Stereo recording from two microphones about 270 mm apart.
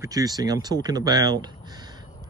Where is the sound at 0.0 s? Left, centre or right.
Centre.